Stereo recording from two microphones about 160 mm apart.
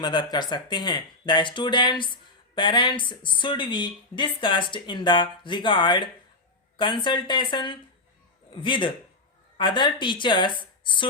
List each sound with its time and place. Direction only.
0.0 s speech: 25° left (ahead or behind)